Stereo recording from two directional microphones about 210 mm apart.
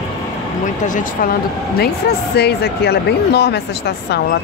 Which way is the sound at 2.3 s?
50° left (ahead or behind).